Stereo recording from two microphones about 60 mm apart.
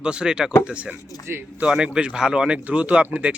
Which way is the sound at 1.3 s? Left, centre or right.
Right.